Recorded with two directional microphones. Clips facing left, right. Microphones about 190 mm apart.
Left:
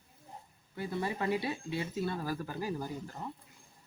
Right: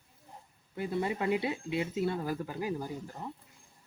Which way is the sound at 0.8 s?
20° right (ahead or behind).